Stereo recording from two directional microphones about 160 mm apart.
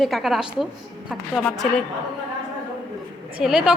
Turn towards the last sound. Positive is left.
turn(degrees=-5)  # may be behind; listen again after turning